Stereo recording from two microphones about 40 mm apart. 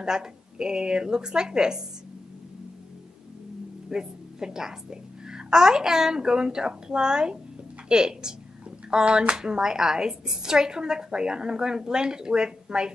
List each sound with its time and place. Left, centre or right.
0.0 s a woman's voice: centre
3.9 s a woman's voice: centre